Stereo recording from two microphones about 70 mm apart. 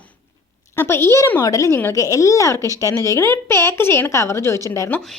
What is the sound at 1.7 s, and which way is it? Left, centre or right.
Speech, left.